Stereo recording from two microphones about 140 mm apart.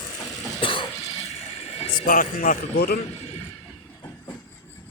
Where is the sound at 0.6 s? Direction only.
40° left (ahead or behind).